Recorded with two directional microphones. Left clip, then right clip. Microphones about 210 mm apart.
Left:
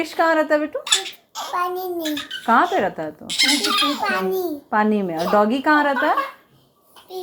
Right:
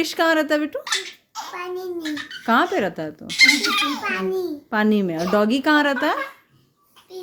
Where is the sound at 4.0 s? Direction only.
Centre (ahead or behind).